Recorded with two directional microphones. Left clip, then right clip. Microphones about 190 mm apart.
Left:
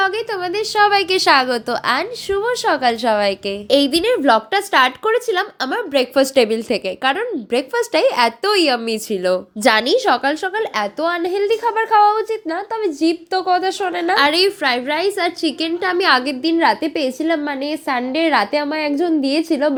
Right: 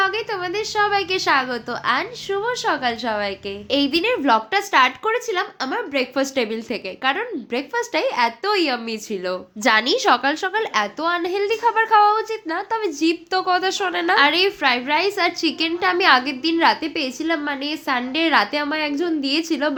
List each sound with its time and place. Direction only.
0.0 s a woman's voice: 20° left (ahead or behind)